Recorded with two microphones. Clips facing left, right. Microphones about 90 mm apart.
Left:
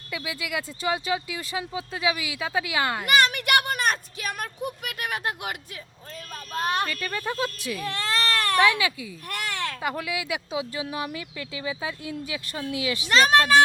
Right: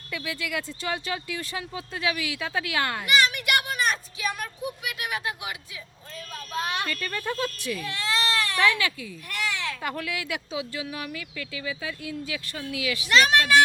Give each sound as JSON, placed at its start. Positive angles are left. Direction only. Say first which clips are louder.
{"t": 0.1, "sound": "speech", "louder": "even", "side_deg": 10}
{"t": 3.1, "sound": "a sound", "louder": "left 2 dB", "side_deg": 50}
{"t": 6.5, "sound": "speech", "louder": "left 3 dB", "side_deg": 45}
{"t": 6.8, "sound": "speech", "louder": "left 1 dB", "side_deg": 5}
{"t": 7.9, "sound": "baby cry", "louder": "left 1 dB", "side_deg": 45}
{"t": 8.6, "sound": "speech", "louder": "left 2 dB", "side_deg": 10}
{"t": 9.3, "sound": "a sound", "louder": "even", "side_deg": 45}
{"t": 9.8, "sound": "speech", "louder": "left 2 dB", "side_deg": 10}
{"t": 10.6, "sound": "speech", "louder": "left 3 dB", "side_deg": 25}